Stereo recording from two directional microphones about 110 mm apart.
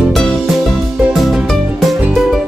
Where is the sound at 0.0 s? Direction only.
Centre (ahead or behind).